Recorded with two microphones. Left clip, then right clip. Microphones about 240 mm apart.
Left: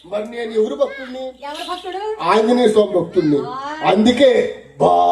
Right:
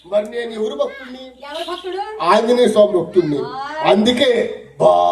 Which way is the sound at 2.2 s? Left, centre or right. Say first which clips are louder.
Right 1 dB; right.